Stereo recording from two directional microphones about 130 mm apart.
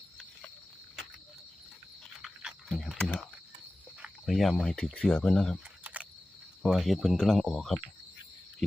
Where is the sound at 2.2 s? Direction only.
5° right (ahead or behind).